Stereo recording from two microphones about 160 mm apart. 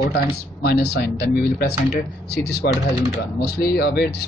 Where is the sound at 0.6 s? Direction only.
85° left.